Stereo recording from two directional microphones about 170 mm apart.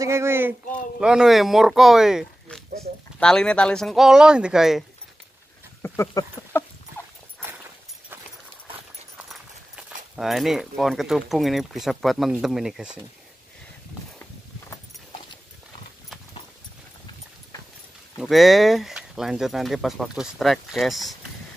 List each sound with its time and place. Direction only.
0.0 s speech: 15° right (ahead or behind)
5.8 s speech: 15° left (ahead or behind)
7.0 s dog: 15° left (ahead or behind)
10.1 s speech: centre (ahead or behind)
18.2 s speech: centre (ahead or behind)